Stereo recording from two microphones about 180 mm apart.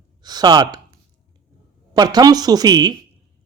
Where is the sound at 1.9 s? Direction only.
20° right (ahead or behind).